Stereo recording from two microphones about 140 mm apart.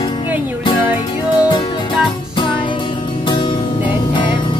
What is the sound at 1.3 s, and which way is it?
Music, 35° left (ahead or behind).